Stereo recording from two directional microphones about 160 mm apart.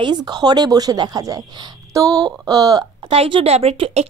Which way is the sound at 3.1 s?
35° right (ahead or behind).